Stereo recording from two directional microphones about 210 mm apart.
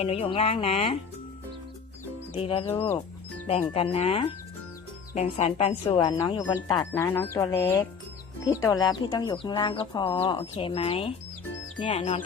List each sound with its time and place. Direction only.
0.0 s speech: 30° left (ahead or behind)
2.3 s speech: 25° left (ahead or behind)
6.0 s speech: 15° left (ahead or behind)